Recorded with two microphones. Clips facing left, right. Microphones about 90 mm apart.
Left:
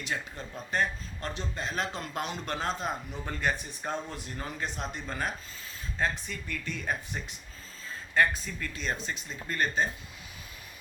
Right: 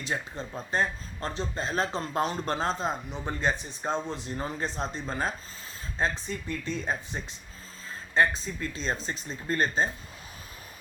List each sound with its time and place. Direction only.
0.0 s speech: 30° right (ahead or behind)